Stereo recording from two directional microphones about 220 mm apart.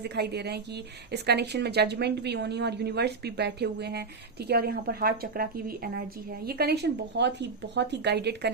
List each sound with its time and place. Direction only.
0.0 s a woman's voice: 50° right (ahead or behind)